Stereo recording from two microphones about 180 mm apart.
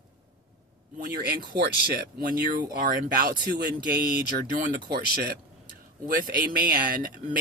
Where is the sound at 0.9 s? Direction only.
55° right (ahead or behind).